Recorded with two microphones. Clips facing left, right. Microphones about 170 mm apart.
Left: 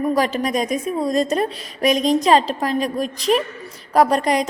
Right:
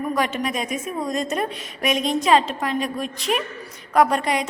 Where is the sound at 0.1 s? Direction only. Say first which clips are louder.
Left 4 dB; 35° left (ahead or behind).